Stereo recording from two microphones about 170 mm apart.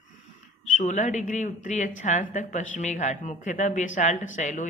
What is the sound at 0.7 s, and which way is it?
A woman's voice, 45° left (ahead or behind).